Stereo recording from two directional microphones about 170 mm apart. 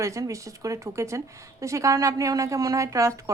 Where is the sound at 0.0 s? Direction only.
20° right (ahead or behind).